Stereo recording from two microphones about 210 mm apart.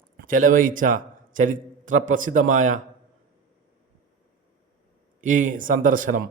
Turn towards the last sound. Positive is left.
turn(degrees=-40)  # may be behind; listen again after turning